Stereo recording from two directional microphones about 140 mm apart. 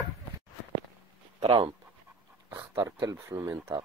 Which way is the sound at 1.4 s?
40° right (ahead or behind).